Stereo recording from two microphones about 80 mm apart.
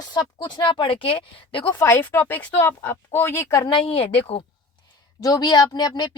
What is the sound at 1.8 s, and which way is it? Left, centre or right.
A woman's voice, left.